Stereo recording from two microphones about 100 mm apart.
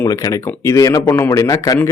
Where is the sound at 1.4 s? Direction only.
35° left (ahead or behind).